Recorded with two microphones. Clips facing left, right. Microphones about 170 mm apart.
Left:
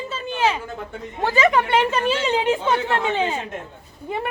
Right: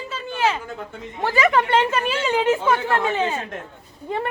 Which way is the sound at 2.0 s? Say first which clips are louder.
Left 1 dB; 25° left (ahead or behind).